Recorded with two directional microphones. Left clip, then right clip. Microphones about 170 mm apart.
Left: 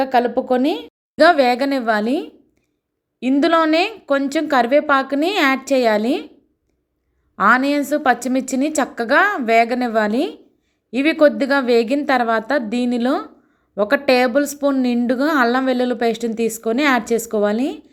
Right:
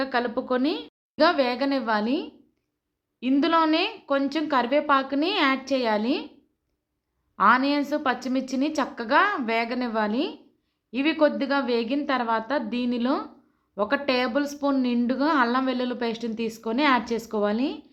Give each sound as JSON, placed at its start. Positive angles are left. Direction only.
{"t": 0.0, "sound": "a woman's voice", "side_deg": 25}
{"t": 7.3, "sound": "a woman's voice", "side_deg": 30}